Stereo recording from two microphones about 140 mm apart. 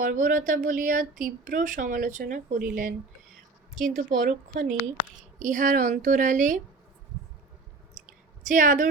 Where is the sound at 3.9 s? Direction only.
75° right (ahead or behind).